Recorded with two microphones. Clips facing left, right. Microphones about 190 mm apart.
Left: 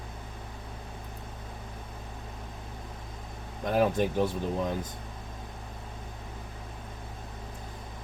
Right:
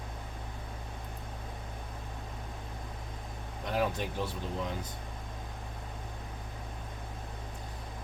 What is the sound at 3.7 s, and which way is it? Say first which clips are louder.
Speech: left 7 dB; 55° left (ahead or behind).